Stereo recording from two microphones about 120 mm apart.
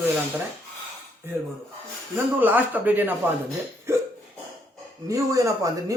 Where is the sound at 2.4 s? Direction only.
15° right (ahead or behind).